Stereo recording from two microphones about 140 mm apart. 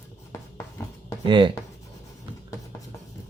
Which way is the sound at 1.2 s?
35° right (ahead or behind).